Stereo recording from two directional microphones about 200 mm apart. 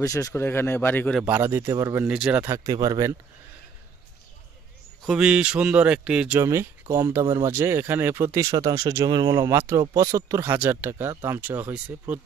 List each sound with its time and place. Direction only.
0.0 s speech: 15° left (ahead or behind)
1.2 s speech: 10° right (ahead or behind)
5.0 s speech: 5° right (ahead or behind)